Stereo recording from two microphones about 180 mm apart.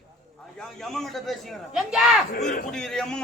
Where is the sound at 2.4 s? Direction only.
45° left (ahead or behind).